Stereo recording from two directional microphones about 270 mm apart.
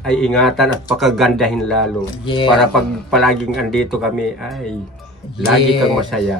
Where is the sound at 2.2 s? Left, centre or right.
Centre.